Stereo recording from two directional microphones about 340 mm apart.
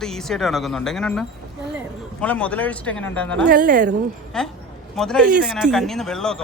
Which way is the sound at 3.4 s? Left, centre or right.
Right.